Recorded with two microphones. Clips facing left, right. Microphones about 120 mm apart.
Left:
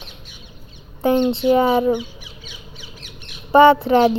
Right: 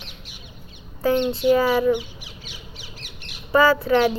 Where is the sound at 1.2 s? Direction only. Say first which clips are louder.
Left 3 dB; 25° left (ahead or behind).